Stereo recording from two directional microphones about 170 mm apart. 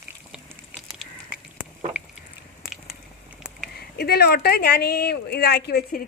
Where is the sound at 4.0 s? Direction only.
70° left (ahead or behind).